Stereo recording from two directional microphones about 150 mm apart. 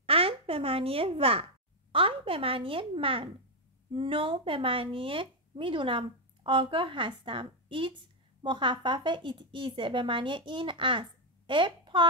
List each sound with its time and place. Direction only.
0.0 s speech: 40° right (ahead or behind)